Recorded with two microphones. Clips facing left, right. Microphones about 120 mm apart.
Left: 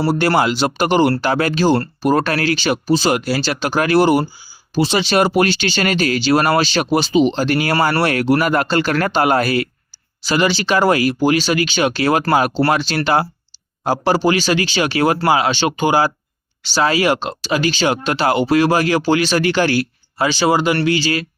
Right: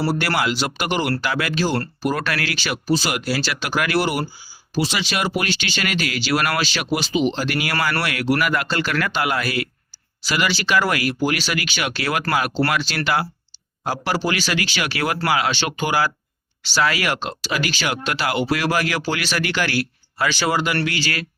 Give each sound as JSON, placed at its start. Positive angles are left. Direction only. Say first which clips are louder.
{"t": 0.0, "sound": "speech", "louder": "left 6 dB", "side_deg": 25}
{"t": 10.2, "sound": "speech", "louder": "left 5 dB", "side_deg": 25}